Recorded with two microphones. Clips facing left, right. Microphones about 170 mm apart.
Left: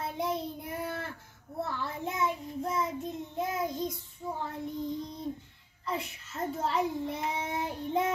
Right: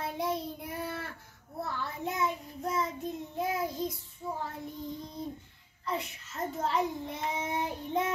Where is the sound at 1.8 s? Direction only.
Centre (ahead or behind).